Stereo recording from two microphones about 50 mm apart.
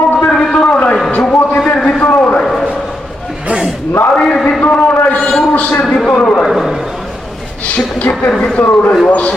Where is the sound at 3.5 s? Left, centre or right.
Right.